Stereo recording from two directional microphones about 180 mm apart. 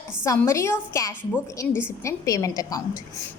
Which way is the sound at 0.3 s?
15° left (ahead or behind).